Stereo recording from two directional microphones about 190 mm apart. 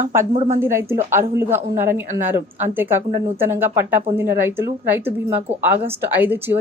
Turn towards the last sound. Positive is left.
turn(degrees=-10)  # may be behind; listen again after turning